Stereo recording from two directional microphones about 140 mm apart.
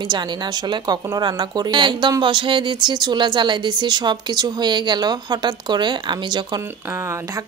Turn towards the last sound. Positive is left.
turn(degrees=-30)  # may be behind; listen again after turning